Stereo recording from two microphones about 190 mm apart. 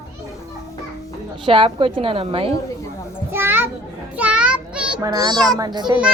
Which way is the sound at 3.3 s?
10° right (ahead or behind).